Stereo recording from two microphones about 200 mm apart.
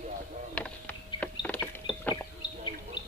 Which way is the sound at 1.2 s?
5° left (ahead or behind).